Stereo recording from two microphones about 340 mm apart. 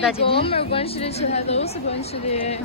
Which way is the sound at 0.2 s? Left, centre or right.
Centre.